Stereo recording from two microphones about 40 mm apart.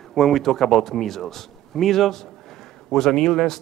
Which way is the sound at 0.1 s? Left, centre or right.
Centre.